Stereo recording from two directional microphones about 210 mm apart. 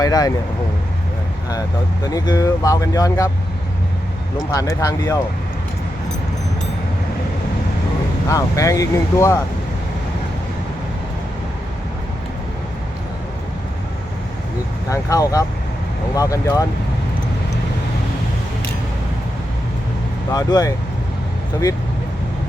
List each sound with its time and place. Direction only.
0.0 s speech: 15° left (ahead or behind)
2.0 s speech: 20° left (ahead or behind)
4.5 s speech: 15° left (ahead or behind)
8.3 s speech: 15° left (ahead or behind)
14.8 s speech: 15° left (ahead or behind)
20.3 s speech: 15° left (ahead or behind)